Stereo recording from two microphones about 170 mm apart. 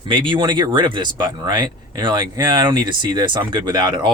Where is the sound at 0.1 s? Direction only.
25° right (ahead or behind).